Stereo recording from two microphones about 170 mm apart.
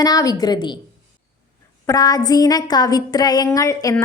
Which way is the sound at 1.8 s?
20° left (ahead or behind).